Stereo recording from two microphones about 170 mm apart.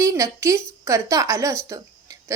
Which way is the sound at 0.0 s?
20° right (ahead or behind).